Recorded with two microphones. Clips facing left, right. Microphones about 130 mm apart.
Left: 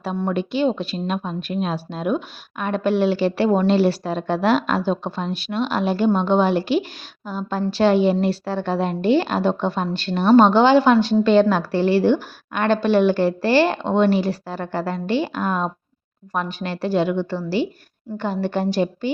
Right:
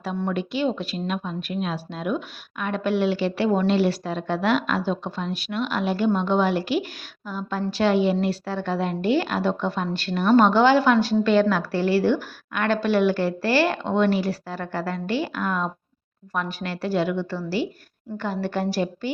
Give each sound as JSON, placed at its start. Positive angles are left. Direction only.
{"t": 0.3, "sound": "a woman's voice", "side_deg": 30}